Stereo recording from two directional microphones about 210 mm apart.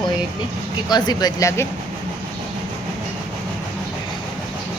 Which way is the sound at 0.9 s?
20° left (ahead or behind).